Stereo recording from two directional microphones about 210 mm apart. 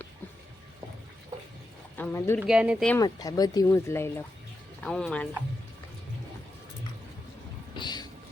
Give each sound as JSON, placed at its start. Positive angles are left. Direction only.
{"t": 2.0, "sound": "speech", "side_deg": 10}
{"t": 2.4, "sound": "speech", "side_deg": -5}
{"t": 2.9, "sound": "speech", "side_deg": 15}
{"t": 7.8, "sound": "thunder", "side_deg": 20}